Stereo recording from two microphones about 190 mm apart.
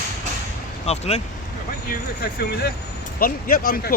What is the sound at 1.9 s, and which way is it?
Speech, 55° left (ahead or behind).